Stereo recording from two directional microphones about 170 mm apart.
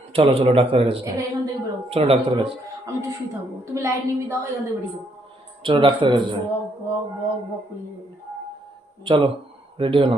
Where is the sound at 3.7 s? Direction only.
15° right (ahead or behind).